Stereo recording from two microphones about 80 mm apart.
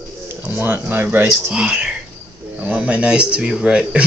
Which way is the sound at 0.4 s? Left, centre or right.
Right.